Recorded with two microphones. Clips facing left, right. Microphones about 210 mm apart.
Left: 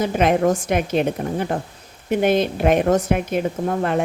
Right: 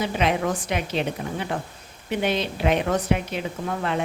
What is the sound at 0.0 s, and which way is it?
A woman's voice, 50° left (ahead or behind).